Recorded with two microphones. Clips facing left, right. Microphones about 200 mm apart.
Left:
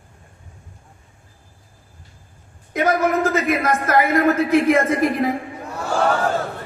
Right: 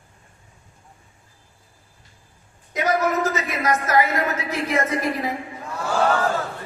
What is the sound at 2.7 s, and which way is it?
A man's voice, 55° left (ahead or behind).